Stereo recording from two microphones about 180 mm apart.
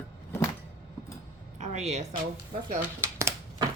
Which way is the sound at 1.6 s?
40° right (ahead or behind).